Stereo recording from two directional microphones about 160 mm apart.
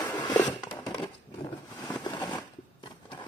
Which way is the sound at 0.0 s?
25° left (ahead or behind).